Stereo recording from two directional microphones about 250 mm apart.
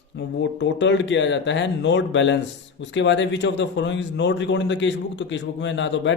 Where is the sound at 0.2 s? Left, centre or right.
Left.